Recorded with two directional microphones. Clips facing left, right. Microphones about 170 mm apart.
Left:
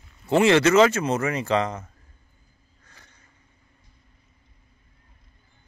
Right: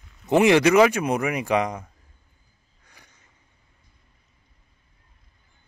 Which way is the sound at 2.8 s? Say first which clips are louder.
Even; 15° right (ahead or behind).